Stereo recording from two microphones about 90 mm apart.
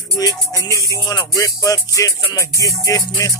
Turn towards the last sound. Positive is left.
turn(degrees=35)  # may be behind; listen again after turning